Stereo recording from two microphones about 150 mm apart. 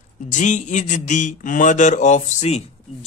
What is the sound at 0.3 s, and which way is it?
Speech, 55° left (ahead or behind).